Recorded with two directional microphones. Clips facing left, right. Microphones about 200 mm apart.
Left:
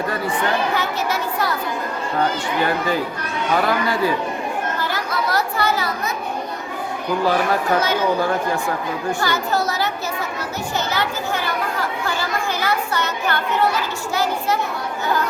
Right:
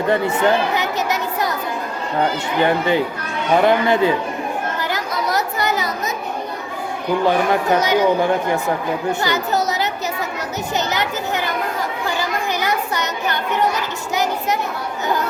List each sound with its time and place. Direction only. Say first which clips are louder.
0.1 s a sound: right 9 dB; 25° right (ahead or behind)
2.6 s speech: right 6 dB; 20° right (ahead or behind)
4.8 s chatter: right 1 dB; 20° right (ahead or behind)
7.3 s a child's voice: right 2 dB; 20° right (ahead or behind)
10.8 s children playing: right 1 dB; 20° right (ahead or behind)